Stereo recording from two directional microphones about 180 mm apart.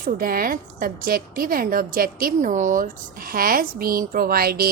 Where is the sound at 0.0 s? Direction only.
55° right (ahead or behind).